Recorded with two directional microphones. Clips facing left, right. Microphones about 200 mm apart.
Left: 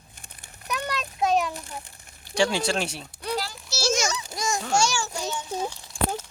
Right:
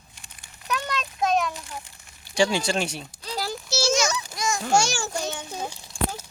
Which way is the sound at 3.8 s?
50° left (ahead or behind).